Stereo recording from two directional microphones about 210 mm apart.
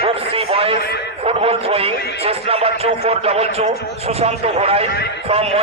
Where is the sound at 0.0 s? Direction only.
25° right (ahead or behind).